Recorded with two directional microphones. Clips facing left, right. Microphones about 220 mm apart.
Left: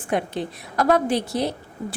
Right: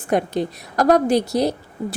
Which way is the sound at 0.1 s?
40° right (ahead or behind).